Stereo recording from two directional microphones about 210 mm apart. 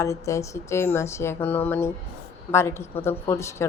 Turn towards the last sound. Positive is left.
turn(degrees=15)  # may be behind; listen again after turning